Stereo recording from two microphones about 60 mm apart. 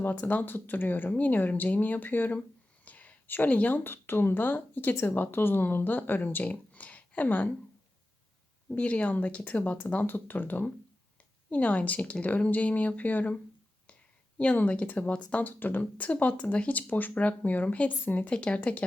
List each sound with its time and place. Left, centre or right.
0.0 s speech: left
2.8 s a sound: left
3.8 s speech: left
8.7 s speech: left
14.3 s speech: left